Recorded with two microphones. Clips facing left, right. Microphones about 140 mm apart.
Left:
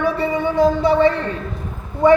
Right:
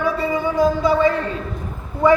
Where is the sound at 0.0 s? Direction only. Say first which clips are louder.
Left 1 dB; 25° left (ahead or behind).